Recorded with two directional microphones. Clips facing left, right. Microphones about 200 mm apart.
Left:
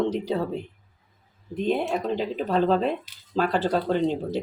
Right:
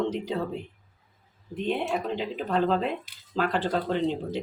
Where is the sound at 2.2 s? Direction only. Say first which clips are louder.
Left 3 dB; 35° left (ahead or behind).